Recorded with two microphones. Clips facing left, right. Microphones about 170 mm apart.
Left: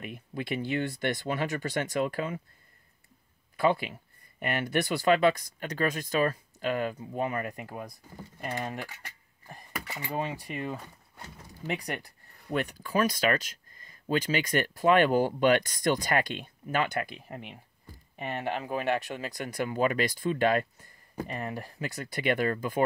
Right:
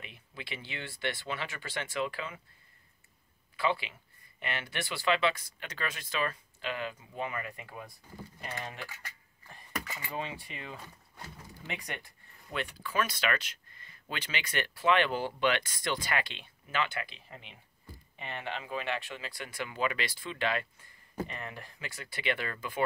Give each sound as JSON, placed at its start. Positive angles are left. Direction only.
{"t": 0.0, "sound": "speech", "side_deg": 50}
{"t": 3.5, "sound": "speech", "side_deg": 45}
{"t": 9.9, "sound": "speech", "side_deg": 40}